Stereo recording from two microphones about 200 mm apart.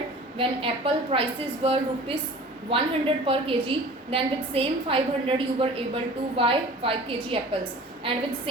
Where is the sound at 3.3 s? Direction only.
25° right (ahead or behind).